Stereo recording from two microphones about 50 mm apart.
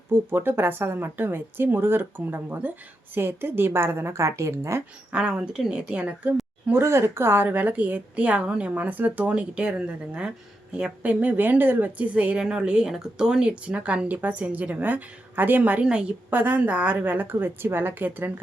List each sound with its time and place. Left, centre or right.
0.1 s a woman's voice: right
5.1 s a woman's voice: centre
6.7 s a woman's voice: right
7.4 s speech: right
9.3 s a woman's voice: right
15.8 s a woman's voice: centre
17.0 s speech: right